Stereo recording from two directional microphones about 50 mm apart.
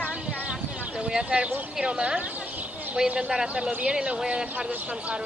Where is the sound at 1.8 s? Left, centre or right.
Centre.